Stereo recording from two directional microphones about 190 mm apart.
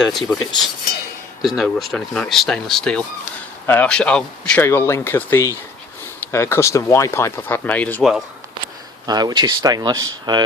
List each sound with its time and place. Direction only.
0.1 s speech: centre (ahead or behind)
1.4 s speech: centre (ahead or behind)
9.0 s speech: 20° right (ahead or behind)